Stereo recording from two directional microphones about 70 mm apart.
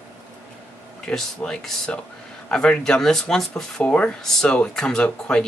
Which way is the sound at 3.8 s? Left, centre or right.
Centre.